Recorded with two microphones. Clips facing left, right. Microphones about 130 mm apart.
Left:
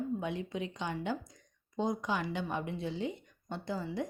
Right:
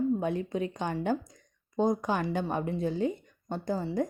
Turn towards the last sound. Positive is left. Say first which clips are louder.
# right 6 dB
turn(degrees=-45)  # may be behind; listen again after turning